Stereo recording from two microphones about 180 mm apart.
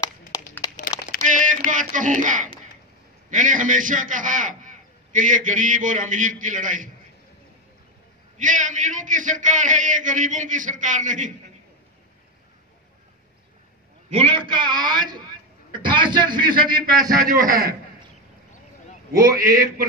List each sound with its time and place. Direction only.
0.3 s a sound: 20° left (ahead or behind)
1.2 s a sound: 45° right (ahead or behind)
1.7 s a man's voice: 45° right (ahead or behind)
8.4 s a man's voice: 45° right (ahead or behind)
14.1 s a man's voice: 30° right (ahead or behind)
17.2 s a man's voice: 50° right (ahead or behind)
19.1 s a man's voice: 55° right (ahead or behind)